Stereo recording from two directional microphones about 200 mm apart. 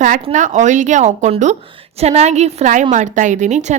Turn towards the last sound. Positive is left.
turn(degrees=-35)  # may be behind; listen again after turning